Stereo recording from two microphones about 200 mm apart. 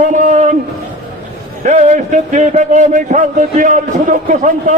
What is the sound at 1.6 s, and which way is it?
A man's voice, 40° right (ahead or behind).